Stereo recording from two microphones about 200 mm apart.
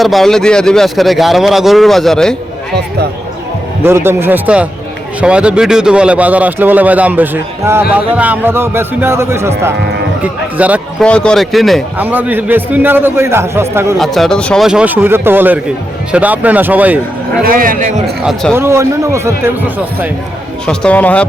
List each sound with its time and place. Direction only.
0.0 s a man's voice: centre (ahead or behind)
3.8 s a man's voice: 10° right (ahead or behind)
11.0 s a man's voice: 5° left (ahead or behind); by 13.9 s 15° right (ahead or behind)
14.0 s a man's voice: centre (ahead or behind)
17.4 s a man's voice: 45° right (ahead or behind)
18.2 s a man's voice: 5° right (ahead or behind)
20.7 s a man's voice: 5° left (ahead or behind)